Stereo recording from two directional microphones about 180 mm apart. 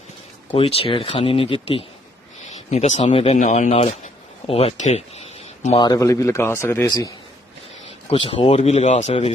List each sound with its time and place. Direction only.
0.5 s speech: 30° left (ahead or behind)
3.3 s speech: 45° left (ahead or behind)
5.8 s a man's voice: 20° left (ahead or behind)
8.1 s speech: 30° left (ahead or behind)